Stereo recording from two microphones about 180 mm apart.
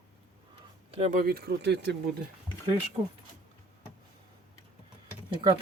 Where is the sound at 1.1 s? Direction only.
60° right (ahead or behind).